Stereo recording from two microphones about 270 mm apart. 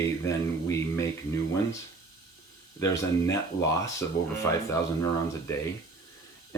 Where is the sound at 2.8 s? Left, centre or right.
Centre.